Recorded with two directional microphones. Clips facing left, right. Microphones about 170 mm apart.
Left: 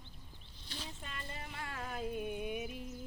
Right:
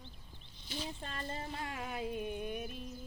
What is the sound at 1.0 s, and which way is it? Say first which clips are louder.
Speech: right 5 dB; 35° right (ahead or behind).